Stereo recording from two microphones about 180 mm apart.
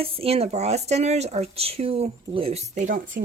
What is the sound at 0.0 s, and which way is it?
Speech, 30° right (ahead or behind).